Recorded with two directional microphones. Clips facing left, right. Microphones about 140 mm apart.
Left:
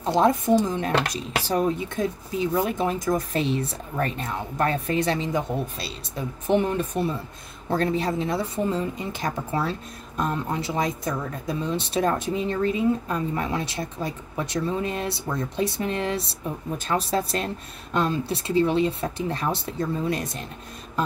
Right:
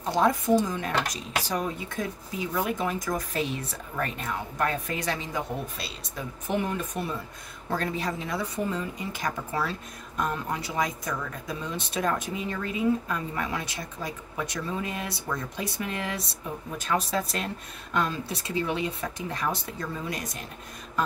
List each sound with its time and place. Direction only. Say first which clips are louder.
0.0 s a woman's voice: left 4 dB; 25° left (ahead or behind)